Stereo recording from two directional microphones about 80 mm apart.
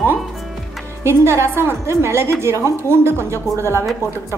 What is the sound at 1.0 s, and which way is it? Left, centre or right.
A woman's voice, right.